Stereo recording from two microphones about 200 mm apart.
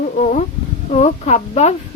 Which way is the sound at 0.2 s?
40° left (ahead or behind).